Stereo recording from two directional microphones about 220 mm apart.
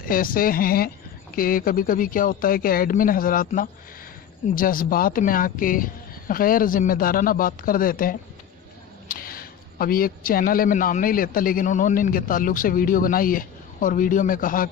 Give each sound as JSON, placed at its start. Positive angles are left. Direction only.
{"t": 0.0, "sound": "a man's voice", "side_deg": 40}